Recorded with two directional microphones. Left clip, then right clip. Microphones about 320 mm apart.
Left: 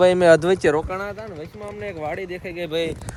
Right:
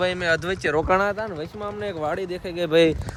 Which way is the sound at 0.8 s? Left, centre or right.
Centre.